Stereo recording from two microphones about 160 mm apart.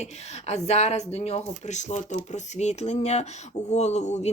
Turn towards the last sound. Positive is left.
turn(degrees=45)  # may be behind; listen again after turning